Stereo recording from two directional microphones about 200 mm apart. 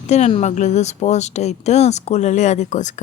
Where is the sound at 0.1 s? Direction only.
35° left (ahead or behind).